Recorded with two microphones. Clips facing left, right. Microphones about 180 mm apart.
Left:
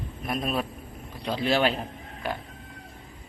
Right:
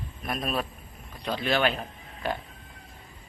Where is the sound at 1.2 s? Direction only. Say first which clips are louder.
Left 2 dB; 25° left (ahead or behind).